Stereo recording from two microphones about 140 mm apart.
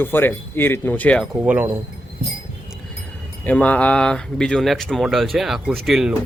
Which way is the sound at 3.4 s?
10° left (ahead or behind).